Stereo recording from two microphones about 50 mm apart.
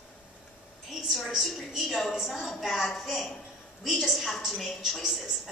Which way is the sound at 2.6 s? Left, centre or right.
Centre.